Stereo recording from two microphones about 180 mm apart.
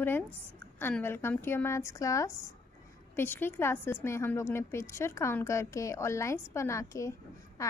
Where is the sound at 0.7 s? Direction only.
10° left (ahead or behind).